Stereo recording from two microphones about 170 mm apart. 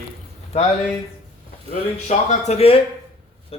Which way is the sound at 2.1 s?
40° left (ahead or behind).